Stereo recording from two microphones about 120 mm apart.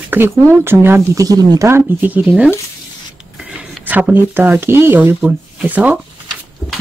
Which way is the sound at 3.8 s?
15° right (ahead or behind).